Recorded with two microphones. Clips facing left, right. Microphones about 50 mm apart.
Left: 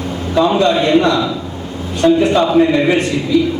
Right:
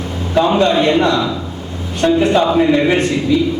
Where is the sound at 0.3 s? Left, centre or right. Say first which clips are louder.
Even; right.